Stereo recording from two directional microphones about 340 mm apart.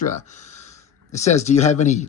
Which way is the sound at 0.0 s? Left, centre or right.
Left.